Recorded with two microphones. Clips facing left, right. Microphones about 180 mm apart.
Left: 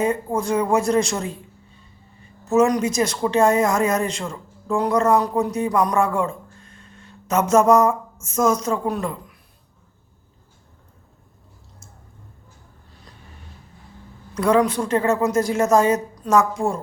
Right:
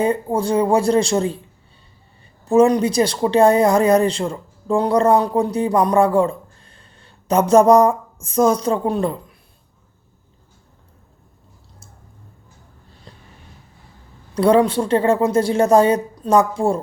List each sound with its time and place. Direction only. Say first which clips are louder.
0.3 s a woman's voice: right 3 dB; 30° right (ahead or behind)
2.4 s speech: right 4 dB; 30° right (ahead or behind)
14.3 s a woman's voice: right 4 dB; 30° right (ahead or behind)